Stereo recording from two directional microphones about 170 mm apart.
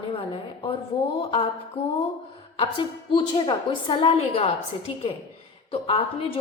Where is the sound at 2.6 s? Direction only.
30° left (ahead or behind).